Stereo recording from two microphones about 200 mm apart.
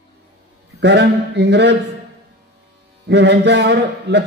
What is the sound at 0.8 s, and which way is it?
Speech, 60° right (ahead or behind).